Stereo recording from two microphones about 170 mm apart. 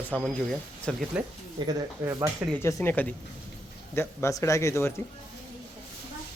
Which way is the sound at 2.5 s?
15° left (ahead or behind).